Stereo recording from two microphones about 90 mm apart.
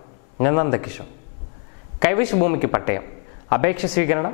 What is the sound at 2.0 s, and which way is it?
Speech, 15° left (ahead or behind).